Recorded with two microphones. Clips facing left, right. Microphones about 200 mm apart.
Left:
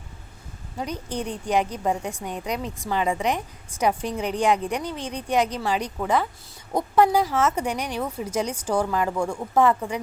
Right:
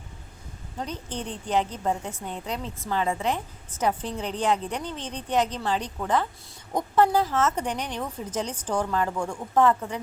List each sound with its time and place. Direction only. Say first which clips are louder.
0.8 s a woman's voice: left 4 dB; 10° left (ahead or behind)